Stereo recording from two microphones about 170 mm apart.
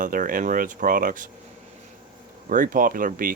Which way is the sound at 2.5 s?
55° right (ahead or behind).